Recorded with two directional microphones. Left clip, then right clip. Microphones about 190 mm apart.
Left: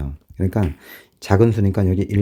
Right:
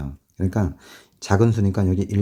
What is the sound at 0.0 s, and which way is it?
Speech, 30° left (ahead or behind).